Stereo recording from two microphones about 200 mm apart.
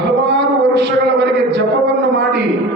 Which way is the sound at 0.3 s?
60° right (ahead or behind).